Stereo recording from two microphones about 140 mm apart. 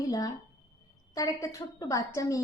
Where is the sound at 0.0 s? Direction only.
25° left (ahead or behind).